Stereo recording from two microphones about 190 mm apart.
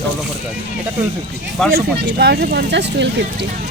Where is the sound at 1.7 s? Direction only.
55° right (ahead or behind).